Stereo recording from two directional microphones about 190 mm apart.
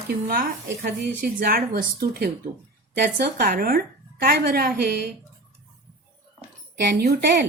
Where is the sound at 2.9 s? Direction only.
65° right (ahead or behind).